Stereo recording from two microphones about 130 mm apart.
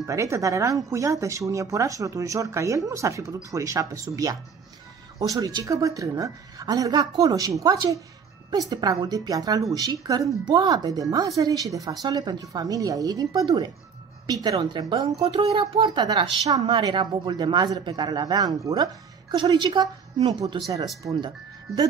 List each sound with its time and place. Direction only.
0.0 s a woman's voice: 25° right (ahead or behind)
15.1 s speech: 45° right (ahead or behind); by 20.9 s 30° right (ahead or behind)